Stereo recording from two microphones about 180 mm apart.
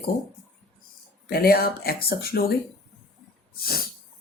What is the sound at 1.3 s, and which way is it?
Speech, 55° left (ahead or behind).